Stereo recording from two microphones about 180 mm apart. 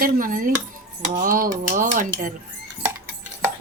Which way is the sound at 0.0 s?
50° right (ahead or behind).